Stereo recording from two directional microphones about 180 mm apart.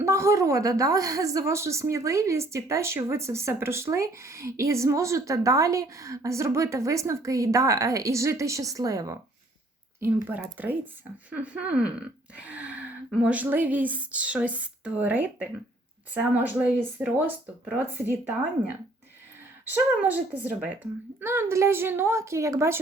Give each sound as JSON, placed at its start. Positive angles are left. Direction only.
{"t": 0.0, "sound": "a woman's voice", "side_deg": -15}
{"t": 19.6, "sound": "a woman's voice", "side_deg": -10}
{"t": 21.2, "sound": "a woman's voice", "side_deg": -10}